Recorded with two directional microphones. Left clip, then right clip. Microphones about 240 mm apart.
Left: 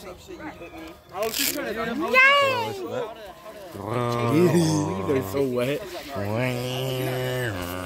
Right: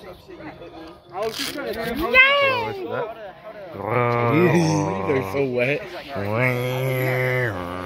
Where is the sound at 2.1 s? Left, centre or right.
Centre.